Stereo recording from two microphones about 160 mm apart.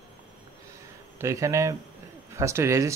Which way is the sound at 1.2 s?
20° right (ahead or behind).